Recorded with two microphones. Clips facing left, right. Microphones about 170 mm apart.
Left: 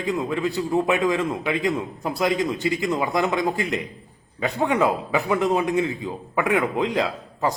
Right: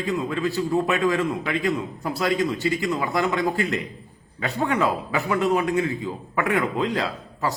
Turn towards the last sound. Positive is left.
turn(degrees=20)  # may be behind; listen again after turning